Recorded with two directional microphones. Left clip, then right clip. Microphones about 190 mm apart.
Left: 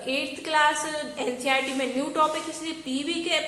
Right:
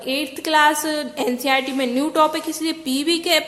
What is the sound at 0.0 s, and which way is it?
A woman's voice, 45° right (ahead or behind).